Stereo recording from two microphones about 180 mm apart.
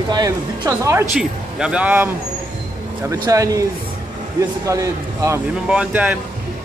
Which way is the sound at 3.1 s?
20° right (ahead or behind).